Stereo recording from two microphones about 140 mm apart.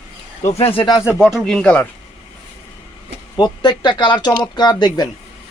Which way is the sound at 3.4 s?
30° left (ahead or behind).